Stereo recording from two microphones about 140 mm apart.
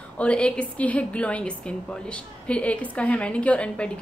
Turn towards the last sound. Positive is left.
turn(degrees=10)  # may be behind; listen again after turning